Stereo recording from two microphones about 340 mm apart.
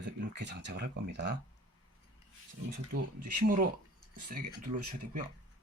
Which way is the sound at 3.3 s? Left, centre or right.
Right.